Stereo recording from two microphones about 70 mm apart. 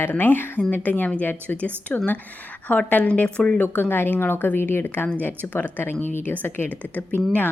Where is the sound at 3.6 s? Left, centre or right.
Left.